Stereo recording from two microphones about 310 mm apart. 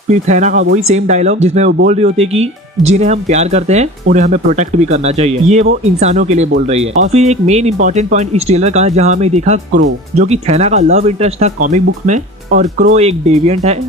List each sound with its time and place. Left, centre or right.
0.1 s speech: right